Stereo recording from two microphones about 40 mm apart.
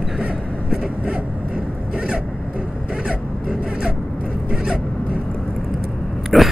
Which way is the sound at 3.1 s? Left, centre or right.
Centre.